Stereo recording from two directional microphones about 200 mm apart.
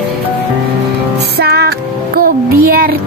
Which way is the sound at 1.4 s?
50° right (ahead or behind).